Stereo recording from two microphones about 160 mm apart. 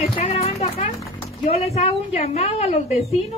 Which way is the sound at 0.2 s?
40° left (ahead or behind).